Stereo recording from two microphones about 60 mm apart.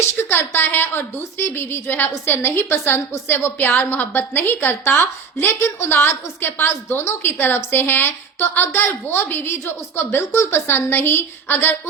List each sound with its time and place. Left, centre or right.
0.2 s a woman's voice: left